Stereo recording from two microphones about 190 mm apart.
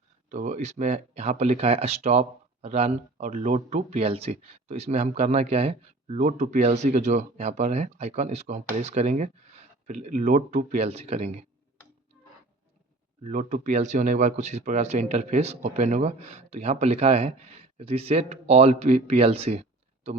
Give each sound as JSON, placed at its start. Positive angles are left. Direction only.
{"t": 0.3, "sound": "speech", "side_deg": -40}
{"t": 13.2, "sound": "speech", "side_deg": -40}